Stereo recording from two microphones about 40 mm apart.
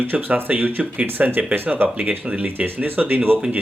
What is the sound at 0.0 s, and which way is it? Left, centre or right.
Speech, right.